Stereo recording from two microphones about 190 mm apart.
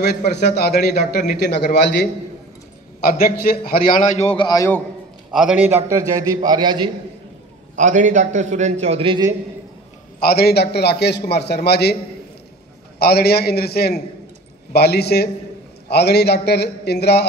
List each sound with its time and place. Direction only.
0.4 s a man's voice: 60° left (ahead or behind); by 4.8 s 15° left (ahead or behind)
5.3 s a man's voice: 5° right (ahead or behind); by 6.9 s 25° right (ahead or behind)
7.7 s a man's voice: 40° right (ahead or behind)
10.2 s a man's voice: 55° left (ahead or behind)
13.0 s a man's voice: 55° left (ahead or behind)